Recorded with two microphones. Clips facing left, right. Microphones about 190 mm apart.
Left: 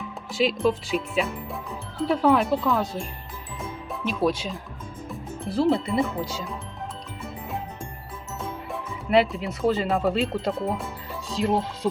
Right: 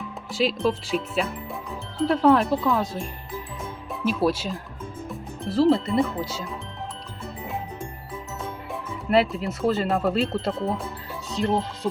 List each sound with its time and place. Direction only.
0.3 s speech: centre (ahead or behind)
8.7 s speech: centre (ahead or behind)